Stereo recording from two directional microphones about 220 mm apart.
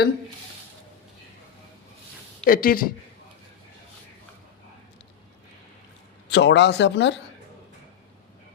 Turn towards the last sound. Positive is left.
turn(degrees=55)  # may be behind; listen again after turning